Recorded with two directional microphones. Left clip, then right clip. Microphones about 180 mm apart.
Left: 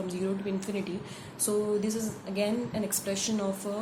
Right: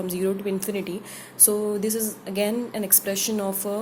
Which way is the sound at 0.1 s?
45° right (ahead or behind).